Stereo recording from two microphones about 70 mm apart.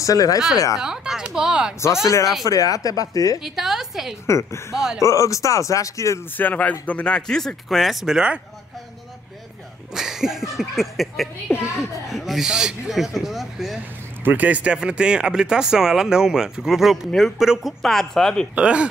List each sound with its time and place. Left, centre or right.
0.0 s speech: left
0.7 s speech: centre
2.4 s speech: left
3.4 s a woman's voice: centre
4.3 s speech: left
4.7 s speech: centre
5.0 s speech: left
6.3 s speech: left; by 8.4 s centre
9.9 s a sound: centre
12.1 s speech: centre
14.2 s speech: right; by 18.5 s centre
18.5 s speech: centre